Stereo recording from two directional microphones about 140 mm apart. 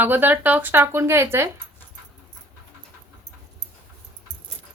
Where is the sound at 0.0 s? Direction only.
15° right (ahead or behind).